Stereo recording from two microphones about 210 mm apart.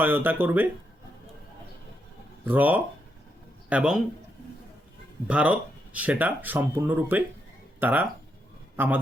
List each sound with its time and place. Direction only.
0.0 s speech: 10° right (ahead or behind)
2.5 s speech: 10° right (ahead or behind)
5.3 s speech: 5° right (ahead or behind)
8.7 s a sound: 10° right (ahead or behind)